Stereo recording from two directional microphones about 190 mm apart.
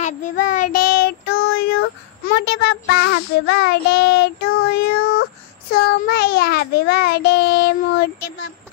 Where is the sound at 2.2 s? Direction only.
60° left (ahead or behind).